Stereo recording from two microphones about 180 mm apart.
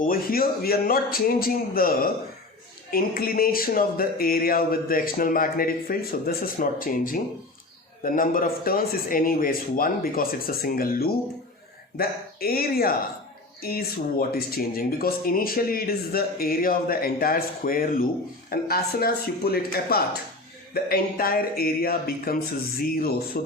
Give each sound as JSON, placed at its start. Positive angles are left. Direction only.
{"t": 0.0, "sound": "speech", "side_deg": 55}